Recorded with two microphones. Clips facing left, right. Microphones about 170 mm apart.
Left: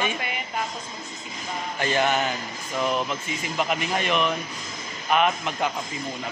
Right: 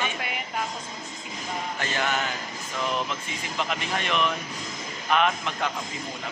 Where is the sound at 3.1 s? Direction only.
10° left (ahead or behind).